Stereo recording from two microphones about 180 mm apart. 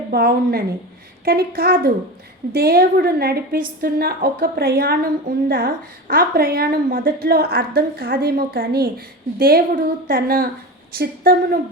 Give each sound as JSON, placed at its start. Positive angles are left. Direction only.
{"t": 0.1, "sound": "a woman's voice", "side_deg": -55}